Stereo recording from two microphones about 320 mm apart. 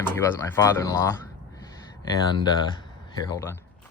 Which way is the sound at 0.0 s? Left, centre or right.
Centre.